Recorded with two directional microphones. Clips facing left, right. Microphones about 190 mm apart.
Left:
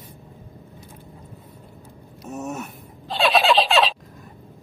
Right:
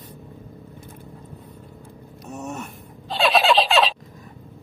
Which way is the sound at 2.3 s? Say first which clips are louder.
Left 2 dB; 5° left (ahead or behind).